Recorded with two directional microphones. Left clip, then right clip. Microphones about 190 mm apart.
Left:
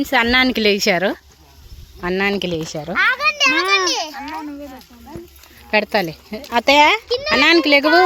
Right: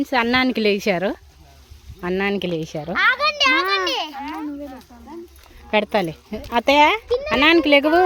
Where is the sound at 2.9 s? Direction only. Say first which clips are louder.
Left 1 dB; 10° right (ahead or behind).